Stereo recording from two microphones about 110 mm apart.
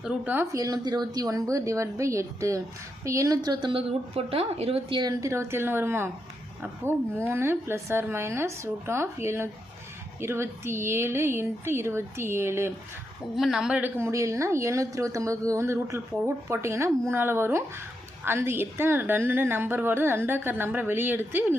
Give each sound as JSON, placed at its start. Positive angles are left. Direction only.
{"t": 0.5, "sound": "a woman's voice", "side_deg": -35}
{"t": 5.2, "sound": "speech", "side_deg": -25}
{"t": 7.3, "sound": "speech", "side_deg": -20}
{"t": 13.3, "sound": "a woman's voice", "side_deg": -5}
{"t": 14.1, "sound": "speech", "side_deg": -25}